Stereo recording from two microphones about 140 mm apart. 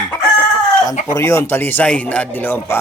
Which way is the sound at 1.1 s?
20° left (ahead or behind).